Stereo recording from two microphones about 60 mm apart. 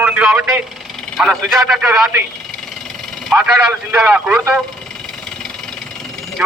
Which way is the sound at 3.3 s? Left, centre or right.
Right.